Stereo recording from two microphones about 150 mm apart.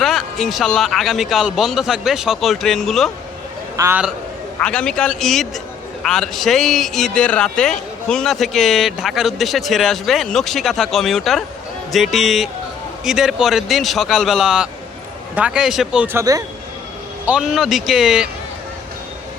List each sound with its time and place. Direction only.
0.0 s a man's voice: centre (ahead or behind)
3.8 s a man's voice: 15° right (ahead or behind)
4.6 s a man's voice: 5° left (ahead or behind)
16.1 s speech: 20° right (ahead or behind)
17.2 s a man's voice: 5° right (ahead or behind)